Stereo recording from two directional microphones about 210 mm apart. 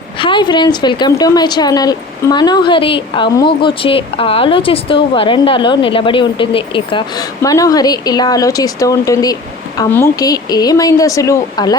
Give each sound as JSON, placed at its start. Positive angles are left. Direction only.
{"t": 0.2, "sound": "a woman's voice", "side_deg": 20}